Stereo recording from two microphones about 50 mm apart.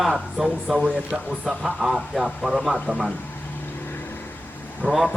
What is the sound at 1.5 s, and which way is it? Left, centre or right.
A man's voice, centre.